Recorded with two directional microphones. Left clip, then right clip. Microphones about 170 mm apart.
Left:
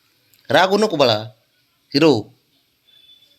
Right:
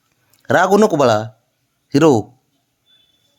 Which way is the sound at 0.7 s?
55° right (ahead or behind).